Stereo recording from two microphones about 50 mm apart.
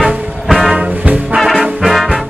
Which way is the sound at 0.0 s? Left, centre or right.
Centre.